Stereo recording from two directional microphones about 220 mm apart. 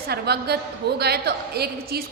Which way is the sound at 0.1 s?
45° right (ahead or behind).